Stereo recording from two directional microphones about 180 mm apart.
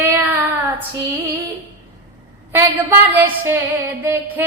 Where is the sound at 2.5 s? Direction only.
10° right (ahead or behind).